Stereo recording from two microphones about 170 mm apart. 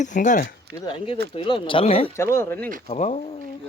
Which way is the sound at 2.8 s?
40° left (ahead or behind).